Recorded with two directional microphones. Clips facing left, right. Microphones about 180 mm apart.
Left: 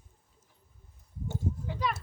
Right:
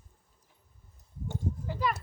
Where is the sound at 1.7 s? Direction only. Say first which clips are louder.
Right 2 dB; 5° right (ahead or behind).